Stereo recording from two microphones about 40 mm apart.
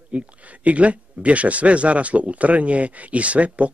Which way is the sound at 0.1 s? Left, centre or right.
Right.